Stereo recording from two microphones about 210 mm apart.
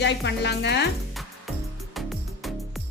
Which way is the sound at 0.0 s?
55° left (ahead or behind).